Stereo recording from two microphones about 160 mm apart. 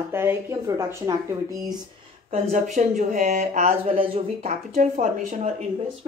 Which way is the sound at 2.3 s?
50° right (ahead or behind).